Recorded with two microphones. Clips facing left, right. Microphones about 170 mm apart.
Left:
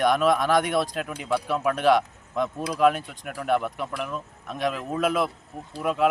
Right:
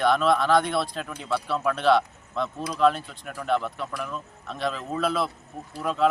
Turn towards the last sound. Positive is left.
turn(degrees=10)  # may be behind; listen again after turning